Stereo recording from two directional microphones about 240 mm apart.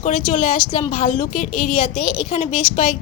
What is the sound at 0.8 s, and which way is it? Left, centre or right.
Speech, left.